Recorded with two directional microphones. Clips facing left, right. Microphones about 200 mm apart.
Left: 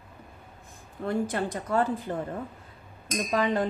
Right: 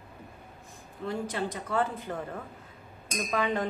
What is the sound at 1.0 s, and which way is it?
Speech, 50° left (ahead or behind).